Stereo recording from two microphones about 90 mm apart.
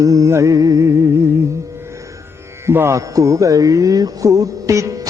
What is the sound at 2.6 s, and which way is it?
Music, 30° right (ahead or behind).